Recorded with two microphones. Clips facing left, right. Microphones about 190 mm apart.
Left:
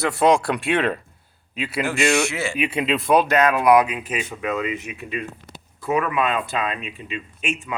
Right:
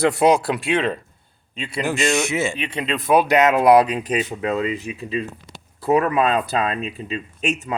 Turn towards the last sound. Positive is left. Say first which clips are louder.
# right 4 dB
turn(degrees=-40)  # may be behind; listen again after turning